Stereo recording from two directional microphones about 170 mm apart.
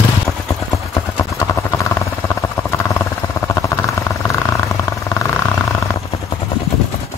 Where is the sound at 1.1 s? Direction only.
15° left (ahead or behind).